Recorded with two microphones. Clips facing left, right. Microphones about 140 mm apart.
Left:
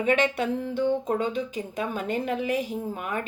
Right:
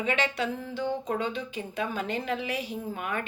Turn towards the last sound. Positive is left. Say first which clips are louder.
# left 2 dB
turn(degrees=35)  # may be behind; listen again after turning